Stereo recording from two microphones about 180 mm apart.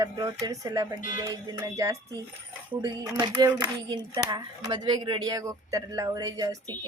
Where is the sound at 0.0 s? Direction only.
20° right (ahead or behind).